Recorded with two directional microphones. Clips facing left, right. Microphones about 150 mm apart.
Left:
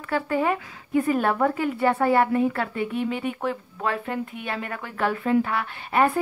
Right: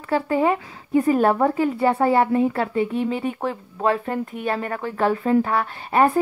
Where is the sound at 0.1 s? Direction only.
25° right (ahead or behind).